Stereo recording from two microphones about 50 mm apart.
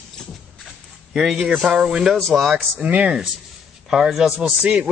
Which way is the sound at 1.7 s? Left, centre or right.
Centre.